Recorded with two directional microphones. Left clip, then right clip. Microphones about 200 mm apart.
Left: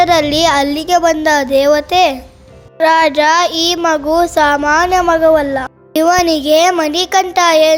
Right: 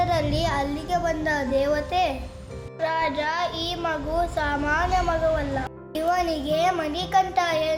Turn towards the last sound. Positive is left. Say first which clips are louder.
# left 14 dB
turn(degrees=55)  # may be behind; listen again after turning